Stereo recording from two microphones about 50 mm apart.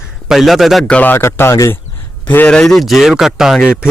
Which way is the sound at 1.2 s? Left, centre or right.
Left.